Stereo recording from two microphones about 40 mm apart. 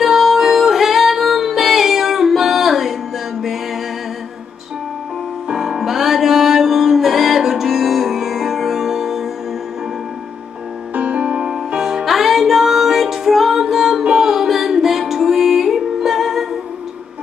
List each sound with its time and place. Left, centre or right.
0.0 s music: centre
5.5 s music: centre
11.0 s music: right
11.4 s music: centre